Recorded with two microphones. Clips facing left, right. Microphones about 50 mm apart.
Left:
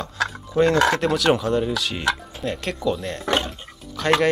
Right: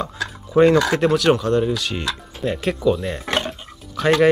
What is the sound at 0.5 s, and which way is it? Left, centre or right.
Speech, centre.